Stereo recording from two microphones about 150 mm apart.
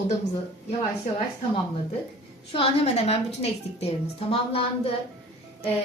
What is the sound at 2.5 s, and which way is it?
A woman's voice, 40° left (ahead or behind).